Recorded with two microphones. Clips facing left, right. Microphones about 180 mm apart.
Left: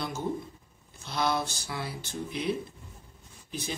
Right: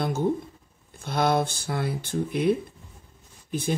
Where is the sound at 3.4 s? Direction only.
50° right (ahead or behind).